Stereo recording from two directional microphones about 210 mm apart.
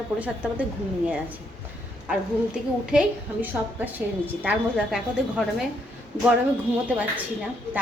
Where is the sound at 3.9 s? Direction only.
5° right (ahead or behind).